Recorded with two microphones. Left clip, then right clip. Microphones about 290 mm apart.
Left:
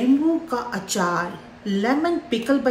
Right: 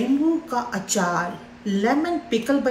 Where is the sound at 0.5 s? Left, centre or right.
Centre.